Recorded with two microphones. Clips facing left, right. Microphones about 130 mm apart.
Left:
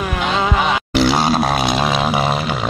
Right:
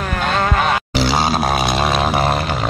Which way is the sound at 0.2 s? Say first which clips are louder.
Even; 5° left (ahead or behind).